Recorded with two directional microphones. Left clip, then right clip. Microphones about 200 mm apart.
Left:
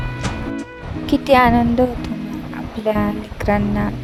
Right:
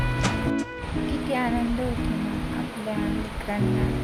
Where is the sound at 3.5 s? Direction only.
45° left (ahead or behind).